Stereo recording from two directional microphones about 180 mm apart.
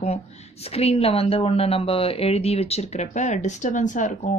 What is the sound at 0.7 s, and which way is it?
Speech, 35° left (ahead or behind).